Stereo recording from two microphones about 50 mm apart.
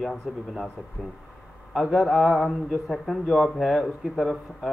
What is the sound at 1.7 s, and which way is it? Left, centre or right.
Speech, centre.